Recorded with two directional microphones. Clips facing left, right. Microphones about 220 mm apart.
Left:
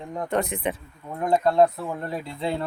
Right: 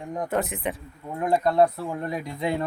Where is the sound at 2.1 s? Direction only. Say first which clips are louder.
Right 1 dB; 15° right (ahead or behind).